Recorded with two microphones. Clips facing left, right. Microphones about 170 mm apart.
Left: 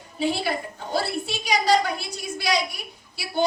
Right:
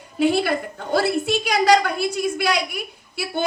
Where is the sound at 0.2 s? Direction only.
60° right (ahead or behind).